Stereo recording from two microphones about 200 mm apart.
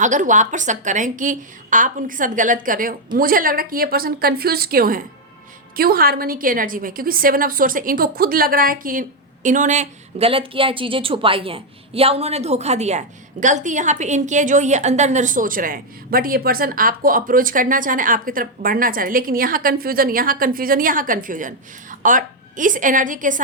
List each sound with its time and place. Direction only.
0.0 s a woman's voice: 40° right (ahead or behind)